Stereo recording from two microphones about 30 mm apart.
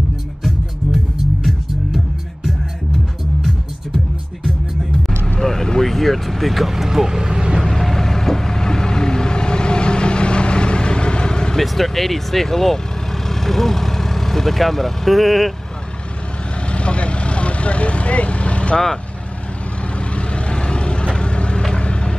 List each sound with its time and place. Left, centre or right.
5.4 s vehicle: centre; by 7.6 s right
7.6 s vehicle: centre; by 11.5 s left
11.6 s speech: centre
16.7 s vehicle: left
20.2 s vehicle: left